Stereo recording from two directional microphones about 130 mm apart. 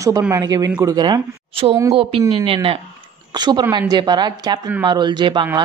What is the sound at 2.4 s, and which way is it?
Speech, 45° right (ahead or behind).